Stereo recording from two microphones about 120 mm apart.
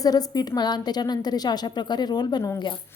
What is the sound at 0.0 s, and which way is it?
A woman's voice, 30° left (ahead or behind).